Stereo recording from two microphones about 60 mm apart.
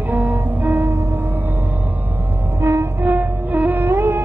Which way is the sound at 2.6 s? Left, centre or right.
Right.